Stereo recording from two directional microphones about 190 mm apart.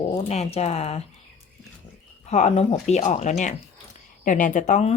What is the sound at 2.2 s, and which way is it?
Speech, 35° left (ahead or behind).